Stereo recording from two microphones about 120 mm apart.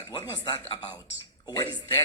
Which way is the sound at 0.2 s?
40° left (ahead or behind).